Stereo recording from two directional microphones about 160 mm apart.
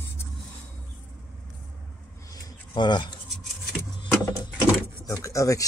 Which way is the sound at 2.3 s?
25° left (ahead or behind).